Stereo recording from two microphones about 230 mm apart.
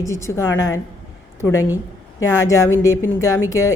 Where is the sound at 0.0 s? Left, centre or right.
Centre.